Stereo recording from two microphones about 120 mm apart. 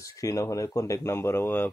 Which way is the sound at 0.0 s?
30° left (ahead or behind).